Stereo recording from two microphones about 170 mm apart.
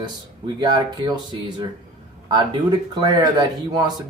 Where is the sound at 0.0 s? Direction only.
25° right (ahead or behind).